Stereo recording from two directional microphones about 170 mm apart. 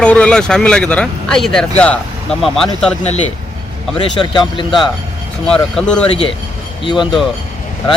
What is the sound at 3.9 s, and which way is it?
Speech, 25° left (ahead or behind).